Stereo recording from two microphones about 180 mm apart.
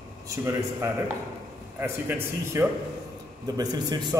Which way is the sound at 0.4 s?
15° right (ahead or behind).